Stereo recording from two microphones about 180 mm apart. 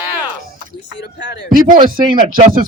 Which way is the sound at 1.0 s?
75° left (ahead or behind).